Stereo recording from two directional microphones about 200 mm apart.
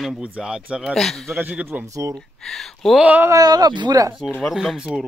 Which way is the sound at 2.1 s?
Centre (ahead or behind).